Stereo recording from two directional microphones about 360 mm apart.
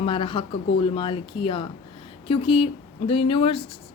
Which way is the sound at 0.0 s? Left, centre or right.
Centre.